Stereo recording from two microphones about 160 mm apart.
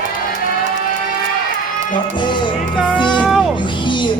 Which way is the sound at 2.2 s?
30° left (ahead or behind).